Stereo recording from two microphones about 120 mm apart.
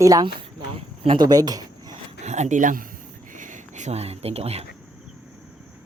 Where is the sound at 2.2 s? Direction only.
75° right (ahead or behind); by 4.6 s 60° right (ahead or behind).